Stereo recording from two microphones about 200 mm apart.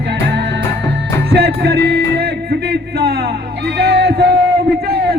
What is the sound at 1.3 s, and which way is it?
Music, 50° right (ahead or behind).